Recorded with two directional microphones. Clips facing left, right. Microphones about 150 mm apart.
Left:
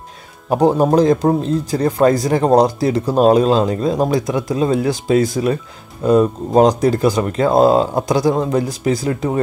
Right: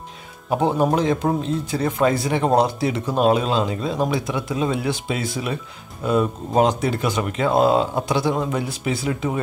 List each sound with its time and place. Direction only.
0.5 s speech: 40° left (ahead or behind)